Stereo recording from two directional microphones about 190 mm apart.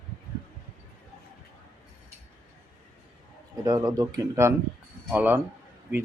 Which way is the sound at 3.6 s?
20° right (ahead or behind).